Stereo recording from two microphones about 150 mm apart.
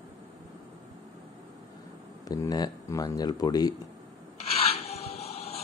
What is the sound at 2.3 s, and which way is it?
Speech, 25° left (ahead or behind).